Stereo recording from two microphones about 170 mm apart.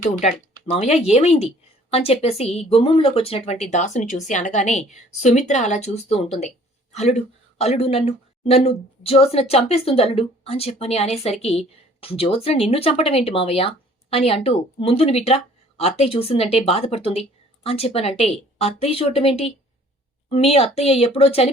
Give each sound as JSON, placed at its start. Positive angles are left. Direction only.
{"t": 0.0, "sound": "a woman's voice", "side_deg": 45}